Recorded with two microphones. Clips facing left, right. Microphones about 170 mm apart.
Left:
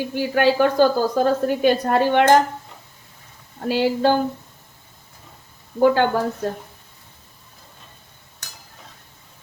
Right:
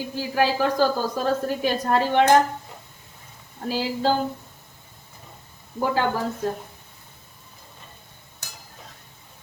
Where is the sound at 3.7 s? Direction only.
65° left (ahead or behind).